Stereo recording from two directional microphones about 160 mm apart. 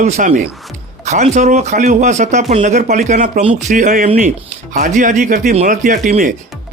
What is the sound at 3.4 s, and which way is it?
Speech, 45° right (ahead or behind).